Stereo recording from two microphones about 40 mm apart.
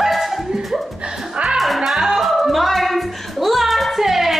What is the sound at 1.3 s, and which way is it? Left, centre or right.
Music, right.